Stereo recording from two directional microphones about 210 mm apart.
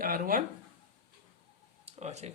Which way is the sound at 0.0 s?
40° right (ahead or behind).